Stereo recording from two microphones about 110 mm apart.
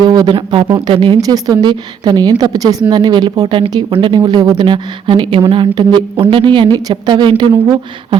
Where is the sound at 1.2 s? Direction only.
35° right (ahead or behind).